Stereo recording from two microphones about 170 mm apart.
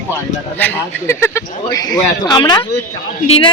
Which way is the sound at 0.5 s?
10° left (ahead or behind).